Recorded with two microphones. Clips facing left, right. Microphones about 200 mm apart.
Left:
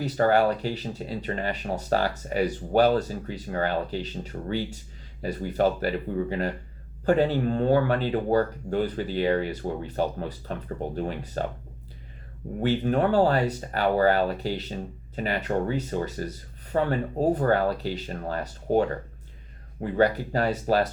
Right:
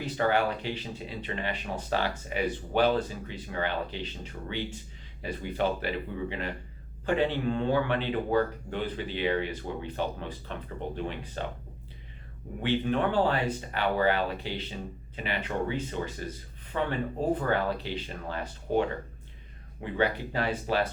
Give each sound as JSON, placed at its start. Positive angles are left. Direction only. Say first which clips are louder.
{"t": 0.0, "sound": "speech", "louder": "left 5 dB", "side_deg": 40}
{"t": 12.5, "sound": "speech", "louder": "left 4 dB", "side_deg": 40}